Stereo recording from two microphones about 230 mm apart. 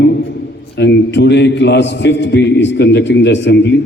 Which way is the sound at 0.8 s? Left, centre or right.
Left.